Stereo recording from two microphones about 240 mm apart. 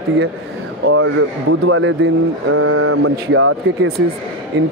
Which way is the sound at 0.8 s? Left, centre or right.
Right.